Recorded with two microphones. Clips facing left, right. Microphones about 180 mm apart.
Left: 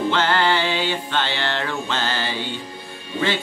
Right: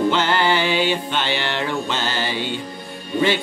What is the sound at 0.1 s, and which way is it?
Music, 15° right (ahead or behind).